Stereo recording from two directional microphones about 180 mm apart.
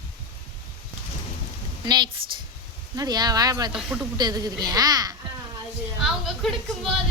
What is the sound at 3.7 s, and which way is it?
Speech, 5° right (ahead or behind).